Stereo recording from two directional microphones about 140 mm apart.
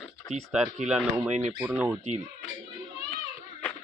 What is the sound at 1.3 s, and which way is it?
Speech, 55° right (ahead or behind).